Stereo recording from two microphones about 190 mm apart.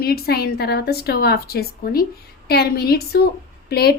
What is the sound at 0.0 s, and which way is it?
Speech, 55° left (ahead or behind).